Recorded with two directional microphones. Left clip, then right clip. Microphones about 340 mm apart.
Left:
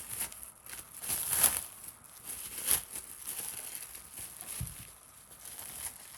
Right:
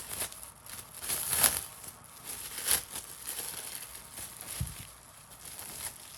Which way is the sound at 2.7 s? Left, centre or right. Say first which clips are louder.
Right 3 dB; centre.